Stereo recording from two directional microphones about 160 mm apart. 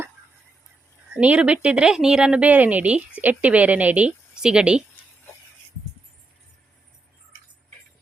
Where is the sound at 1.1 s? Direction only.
5° right (ahead or behind).